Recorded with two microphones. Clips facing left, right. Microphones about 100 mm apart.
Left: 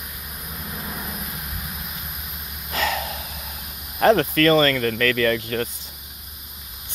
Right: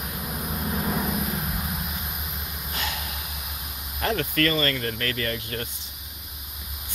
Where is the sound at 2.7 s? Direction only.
90° left.